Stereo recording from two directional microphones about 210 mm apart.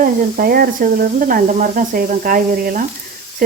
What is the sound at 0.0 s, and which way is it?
Speech, 45° right (ahead or behind).